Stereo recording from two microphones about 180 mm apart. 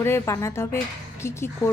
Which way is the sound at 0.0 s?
15° left (ahead or behind).